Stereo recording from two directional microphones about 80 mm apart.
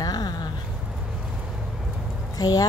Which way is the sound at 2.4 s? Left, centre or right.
Left.